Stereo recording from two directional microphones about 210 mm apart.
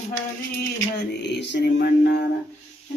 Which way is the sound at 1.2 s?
55° left (ahead or behind).